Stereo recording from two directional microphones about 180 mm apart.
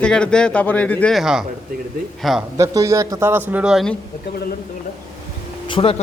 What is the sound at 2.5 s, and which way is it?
A man's voice, 15° right (ahead or behind).